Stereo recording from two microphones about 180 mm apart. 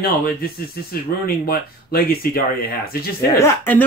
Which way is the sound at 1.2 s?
55° left (ahead or behind).